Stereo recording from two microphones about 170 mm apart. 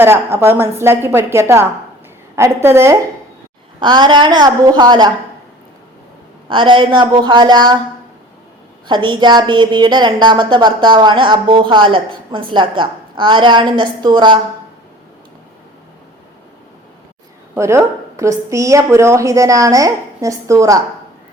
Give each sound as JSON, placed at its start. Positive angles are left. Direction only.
{"t": 0.0, "sound": "a woman's voice", "side_deg": -15}
{"t": 3.8, "sound": "a woman's voice", "side_deg": -25}
{"t": 6.5, "sound": "a woman's voice", "side_deg": -30}
{"t": 8.9, "sound": "a woman's voice", "side_deg": -25}
{"t": 17.5, "sound": "a woman's voice", "side_deg": -15}